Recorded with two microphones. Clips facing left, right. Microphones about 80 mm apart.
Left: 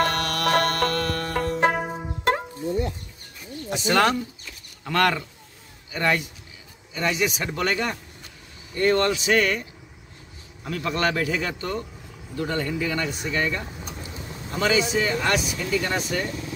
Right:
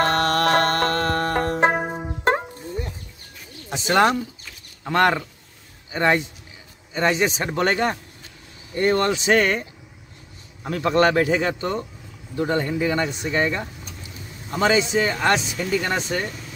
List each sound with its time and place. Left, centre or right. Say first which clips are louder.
0.0 s music: right 4 dB; right
1.7 s music: right 2 dB; right
3.7 s a man's voice: right 2 dB; right
6.9 s speech: right 4 dB; right
8.7 s speech: right 1 dB; right